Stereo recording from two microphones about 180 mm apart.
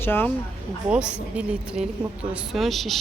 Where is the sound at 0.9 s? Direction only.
5° right (ahead or behind).